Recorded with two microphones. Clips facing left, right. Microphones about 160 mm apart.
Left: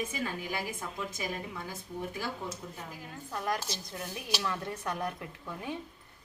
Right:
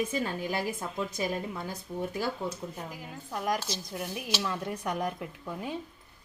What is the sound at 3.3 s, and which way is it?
A woman's voice, 15° right (ahead or behind).